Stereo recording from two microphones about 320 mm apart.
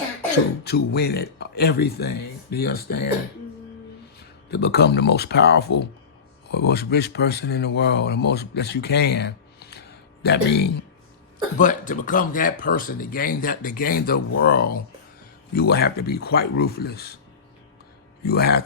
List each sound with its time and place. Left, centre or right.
0.6 s speech: left
4.2 s speech: left
18.3 s speech: left